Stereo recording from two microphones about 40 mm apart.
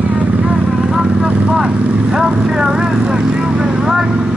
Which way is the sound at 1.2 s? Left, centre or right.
Right.